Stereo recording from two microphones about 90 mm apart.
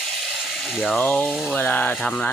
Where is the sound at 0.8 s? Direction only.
20° left (ahead or behind).